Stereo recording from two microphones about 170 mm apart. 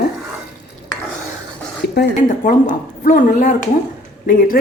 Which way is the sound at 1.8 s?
70° left (ahead or behind).